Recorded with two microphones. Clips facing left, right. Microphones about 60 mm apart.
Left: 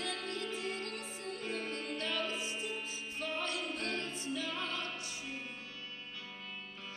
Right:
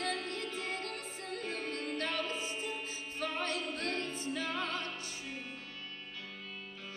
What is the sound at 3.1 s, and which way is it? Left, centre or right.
A capella, right.